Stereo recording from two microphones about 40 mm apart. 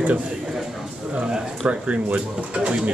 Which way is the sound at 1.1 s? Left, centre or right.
Right.